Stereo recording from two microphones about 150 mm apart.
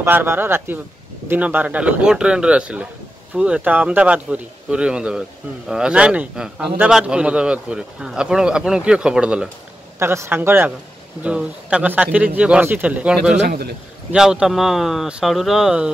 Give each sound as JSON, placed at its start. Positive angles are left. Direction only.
{"t": 0.0, "sound": "a man's voice", "side_deg": -15}
{"t": 9.9, "sound": "speech", "side_deg": -15}
{"t": 13.5, "sound": "a man's voice", "side_deg": -90}
{"t": 14.1, "sound": "a man's voice", "side_deg": -5}